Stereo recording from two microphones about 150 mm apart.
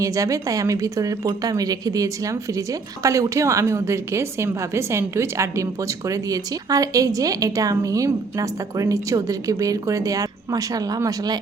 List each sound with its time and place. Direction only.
0.0 s a woman's voice: 20° right (ahead or behind)